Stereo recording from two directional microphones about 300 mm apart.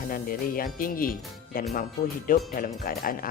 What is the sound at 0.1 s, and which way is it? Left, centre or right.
Speech, left.